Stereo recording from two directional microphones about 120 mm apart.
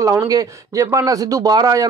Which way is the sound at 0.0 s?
25° right (ahead or behind).